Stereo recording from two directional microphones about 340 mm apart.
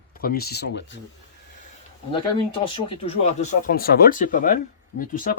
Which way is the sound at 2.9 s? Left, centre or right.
Centre.